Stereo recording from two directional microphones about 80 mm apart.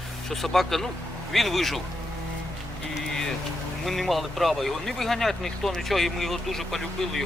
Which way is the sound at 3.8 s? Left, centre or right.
Centre.